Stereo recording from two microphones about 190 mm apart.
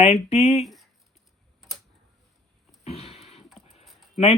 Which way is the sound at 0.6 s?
Centre (ahead or behind).